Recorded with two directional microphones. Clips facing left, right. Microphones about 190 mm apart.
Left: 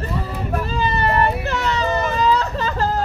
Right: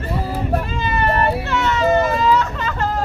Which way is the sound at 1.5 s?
35° left (ahead or behind).